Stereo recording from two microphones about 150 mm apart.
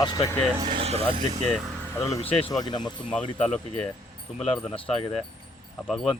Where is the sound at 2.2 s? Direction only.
40° left (ahead or behind).